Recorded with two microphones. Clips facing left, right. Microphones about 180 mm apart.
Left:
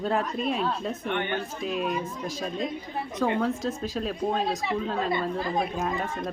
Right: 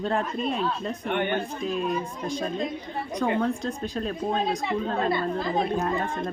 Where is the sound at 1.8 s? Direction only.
5° left (ahead or behind).